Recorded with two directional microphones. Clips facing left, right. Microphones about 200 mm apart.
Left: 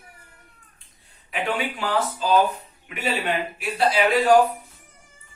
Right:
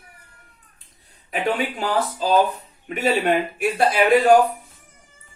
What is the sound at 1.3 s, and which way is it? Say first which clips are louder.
Speech: right 3 dB; 40° right (ahead or behind).